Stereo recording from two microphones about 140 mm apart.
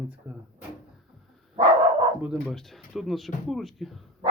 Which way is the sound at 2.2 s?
Centre (ahead or behind).